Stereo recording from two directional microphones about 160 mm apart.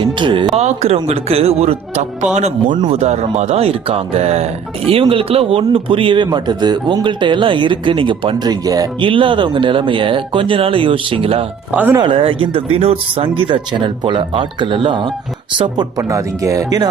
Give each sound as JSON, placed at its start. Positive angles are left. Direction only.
{"t": 0.0, "sound": "speech", "side_deg": -30}
{"t": 0.5, "sound": "speech", "side_deg": -45}
{"t": 11.7, "sound": "speech", "side_deg": -10}
{"t": 11.9, "sound": "speech", "side_deg": -30}